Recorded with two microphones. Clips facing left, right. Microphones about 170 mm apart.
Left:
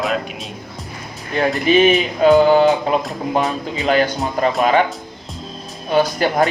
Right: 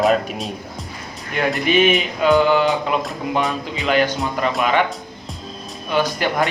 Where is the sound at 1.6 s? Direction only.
35° left (ahead or behind).